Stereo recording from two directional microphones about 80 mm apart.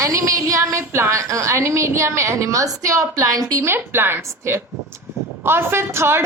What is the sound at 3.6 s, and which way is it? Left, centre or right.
A woman's voice, right.